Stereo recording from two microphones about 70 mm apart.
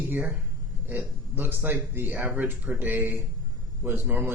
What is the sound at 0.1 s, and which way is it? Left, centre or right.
Speech, right.